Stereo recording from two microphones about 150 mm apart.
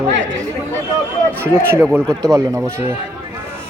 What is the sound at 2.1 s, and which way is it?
Speech, 5° left (ahead or behind).